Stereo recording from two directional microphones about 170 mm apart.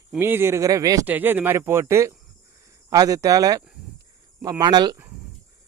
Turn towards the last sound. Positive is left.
turn(degrees=-25)  # may be behind; listen again after turning